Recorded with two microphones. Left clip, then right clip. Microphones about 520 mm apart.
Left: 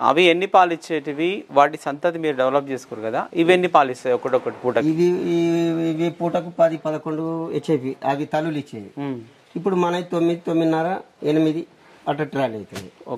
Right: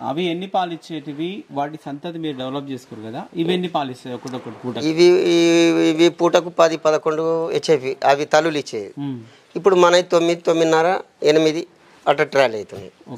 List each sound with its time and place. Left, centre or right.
0.0 s speech: left
4.9 s a sound: right
6.5 s speech: right
9.6 s speech: right